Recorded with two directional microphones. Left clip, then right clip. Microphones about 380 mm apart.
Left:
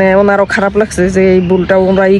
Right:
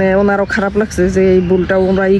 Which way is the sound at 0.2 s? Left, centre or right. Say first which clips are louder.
Left 4 dB; left.